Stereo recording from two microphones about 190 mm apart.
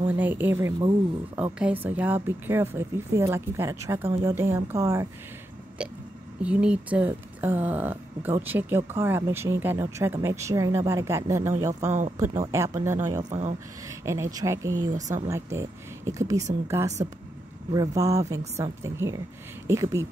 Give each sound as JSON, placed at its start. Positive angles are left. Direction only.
{"t": 0.0, "sound": "speech", "side_deg": -10}
{"t": 5.8, "sound": "a sound", "side_deg": -5}
{"t": 6.4, "sound": "speech", "side_deg": -5}
{"t": 13.2, "sound": "speech", "side_deg": -40}
{"t": 13.8, "sound": "speech", "side_deg": -15}
{"t": 14.9, "sound": "speech", "side_deg": -40}
{"t": 15.2, "sound": "speech", "side_deg": -15}